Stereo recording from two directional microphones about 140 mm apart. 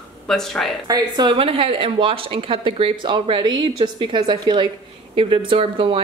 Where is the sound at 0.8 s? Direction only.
30° right (ahead or behind).